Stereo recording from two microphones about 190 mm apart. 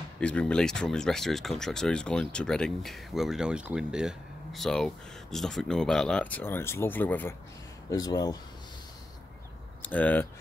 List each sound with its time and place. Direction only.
0.2 s speech: 5° left (ahead or behind)
9.8 s speech: 10° left (ahead or behind)